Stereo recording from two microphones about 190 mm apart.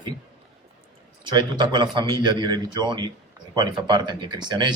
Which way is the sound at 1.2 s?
20° right (ahead or behind).